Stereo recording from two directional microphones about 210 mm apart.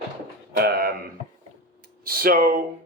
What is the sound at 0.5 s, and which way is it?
A man's voice, 45° right (ahead or behind).